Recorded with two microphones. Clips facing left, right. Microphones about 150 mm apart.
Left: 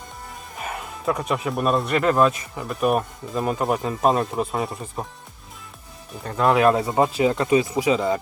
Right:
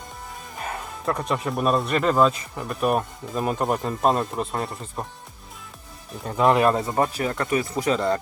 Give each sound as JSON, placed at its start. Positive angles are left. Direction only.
{"t": 0.5, "sound": "speech", "side_deg": 0}
{"t": 6.2, "sound": "speech", "side_deg": 0}
{"t": 6.8, "sound": "speech", "side_deg": 15}
{"t": 7.7, "sound": "speech", "side_deg": 5}